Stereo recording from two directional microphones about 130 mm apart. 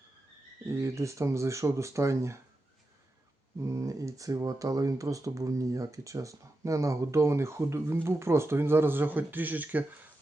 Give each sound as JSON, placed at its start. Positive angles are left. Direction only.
{"t": 0.7, "sound": "speech", "side_deg": -25}
{"t": 3.6, "sound": "speech", "side_deg": -25}